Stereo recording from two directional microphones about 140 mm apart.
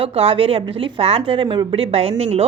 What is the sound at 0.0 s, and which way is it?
A woman's voice, 45° right (ahead or behind).